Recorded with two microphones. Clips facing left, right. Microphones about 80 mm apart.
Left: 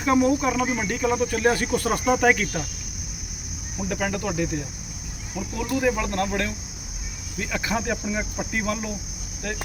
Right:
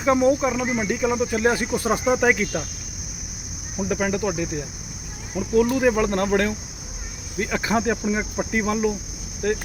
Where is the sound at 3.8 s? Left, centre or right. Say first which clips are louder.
Right 3 dB; right.